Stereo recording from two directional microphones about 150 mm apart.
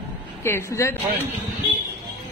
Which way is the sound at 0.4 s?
15° left (ahead or behind).